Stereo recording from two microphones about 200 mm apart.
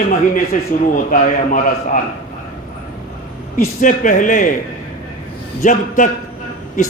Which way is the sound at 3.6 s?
40° left (ahead or behind).